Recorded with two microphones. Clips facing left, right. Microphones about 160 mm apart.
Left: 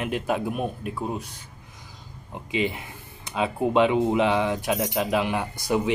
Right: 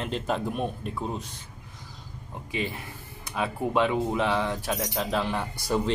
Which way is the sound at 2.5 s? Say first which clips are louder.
Left 5 dB; 20° left (ahead or behind).